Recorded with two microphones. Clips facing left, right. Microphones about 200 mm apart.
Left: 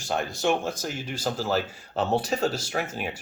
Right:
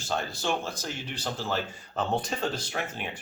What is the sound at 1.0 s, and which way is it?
Speech, 45° left (ahead or behind).